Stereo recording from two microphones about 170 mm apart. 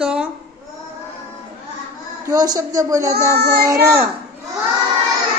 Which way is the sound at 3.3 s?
65° right (ahead or behind).